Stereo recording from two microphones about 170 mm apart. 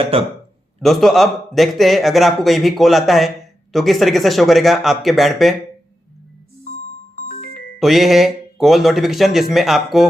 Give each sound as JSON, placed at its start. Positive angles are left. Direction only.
{"t": 0.1, "sound": "speech", "side_deg": -35}
{"t": 0.8, "sound": "a man's voice", "side_deg": 0}
{"t": 7.2, "sound": "music", "side_deg": 50}
{"t": 7.8, "sound": "a man's voice", "side_deg": 0}